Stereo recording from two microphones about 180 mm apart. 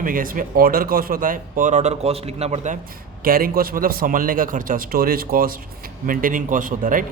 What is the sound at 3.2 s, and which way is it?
Speech, 55° right (ahead or behind).